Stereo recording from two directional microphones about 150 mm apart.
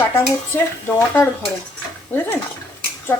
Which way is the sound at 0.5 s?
15° left (ahead or behind).